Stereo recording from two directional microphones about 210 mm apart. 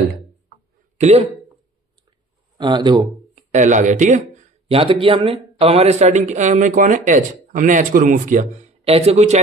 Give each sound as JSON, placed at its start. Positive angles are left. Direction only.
{"t": 0.9, "sound": "speech", "side_deg": -30}
{"t": 2.5, "sound": "speech", "side_deg": -20}
{"t": 3.5, "sound": "speech", "side_deg": -35}